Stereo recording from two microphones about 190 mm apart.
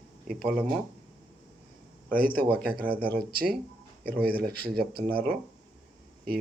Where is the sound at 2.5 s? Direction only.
50° right (ahead or behind).